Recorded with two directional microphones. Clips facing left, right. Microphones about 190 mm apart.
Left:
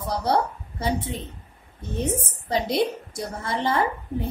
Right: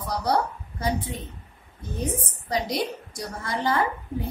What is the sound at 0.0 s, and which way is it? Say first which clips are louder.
A woman's voice: left 1 dB; 25° left (ahead or behind).